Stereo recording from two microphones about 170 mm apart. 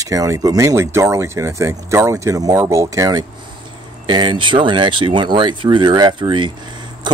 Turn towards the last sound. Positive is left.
turn(degrees=-25)  # may be behind; listen again after turning